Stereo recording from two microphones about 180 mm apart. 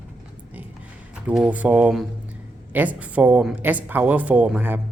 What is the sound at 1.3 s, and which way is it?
Speech, 10° right (ahead or behind).